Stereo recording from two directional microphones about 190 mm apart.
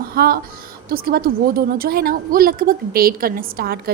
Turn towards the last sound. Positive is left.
turn(degrees=-50)  # may be behind; listen again after turning